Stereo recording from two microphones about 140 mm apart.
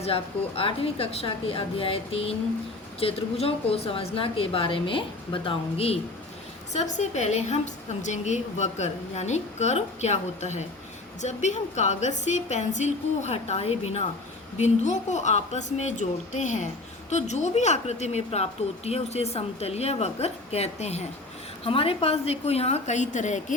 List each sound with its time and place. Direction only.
0.0 s a woman's voice: 45° left (ahead or behind)
6.7 s a woman's voice: 55° left (ahead or behind)